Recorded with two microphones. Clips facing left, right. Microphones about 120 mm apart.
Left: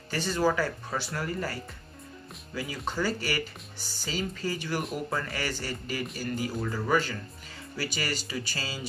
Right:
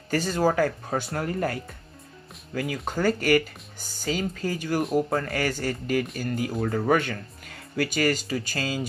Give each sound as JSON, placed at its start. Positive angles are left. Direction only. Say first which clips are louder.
{"t": 0.1, "sound": "speech", "louder": "right 4 dB", "side_deg": -45}